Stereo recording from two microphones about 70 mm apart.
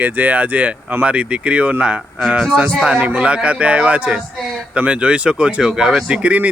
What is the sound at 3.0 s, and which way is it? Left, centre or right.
Speech, centre.